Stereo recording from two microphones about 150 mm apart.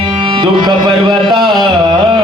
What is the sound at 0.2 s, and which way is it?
Music, 35° right (ahead or behind).